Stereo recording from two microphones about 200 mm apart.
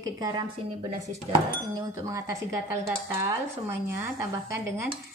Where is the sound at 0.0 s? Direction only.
20° right (ahead or behind).